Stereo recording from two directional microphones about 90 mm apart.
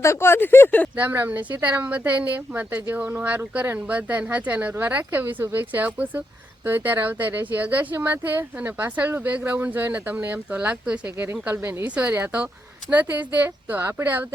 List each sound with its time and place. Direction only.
0.0 s speech: 30° left (ahead or behind)
0.9 s speech: 20° right (ahead or behind)
11.4 s speech: 25° right (ahead or behind)